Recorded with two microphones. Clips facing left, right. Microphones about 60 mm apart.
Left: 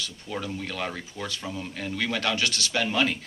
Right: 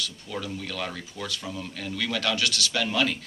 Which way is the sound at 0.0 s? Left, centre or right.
Left.